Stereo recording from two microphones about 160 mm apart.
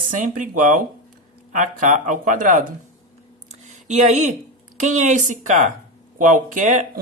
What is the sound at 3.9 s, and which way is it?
Speech, 50° right (ahead or behind).